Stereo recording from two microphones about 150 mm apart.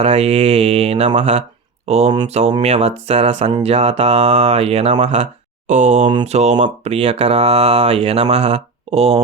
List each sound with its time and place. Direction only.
0.0 s speech: 45° right (ahead or behind)